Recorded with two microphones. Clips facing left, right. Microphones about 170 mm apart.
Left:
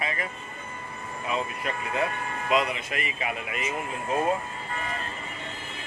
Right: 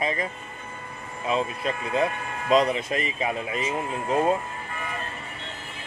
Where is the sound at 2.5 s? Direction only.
40° right (ahead or behind).